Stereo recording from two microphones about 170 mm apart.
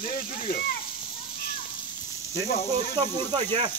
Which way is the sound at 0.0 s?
55° left (ahead or behind).